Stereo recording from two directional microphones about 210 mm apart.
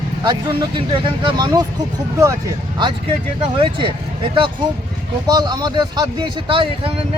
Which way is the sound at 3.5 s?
25° right (ahead or behind).